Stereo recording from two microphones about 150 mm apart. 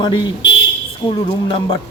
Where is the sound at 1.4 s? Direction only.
35° left (ahead or behind).